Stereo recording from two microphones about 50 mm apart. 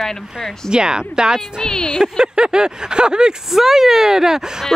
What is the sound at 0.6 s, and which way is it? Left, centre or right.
Speech, centre.